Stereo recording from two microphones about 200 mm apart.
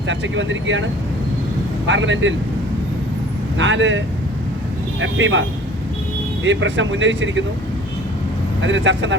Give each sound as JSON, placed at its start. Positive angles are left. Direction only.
{"t": 0.1, "sound": "speech", "side_deg": -70}
{"t": 1.9, "sound": "speech", "side_deg": -70}
{"t": 3.6, "sound": "speech", "side_deg": -70}
{"t": 8.6, "sound": "speech", "side_deg": -65}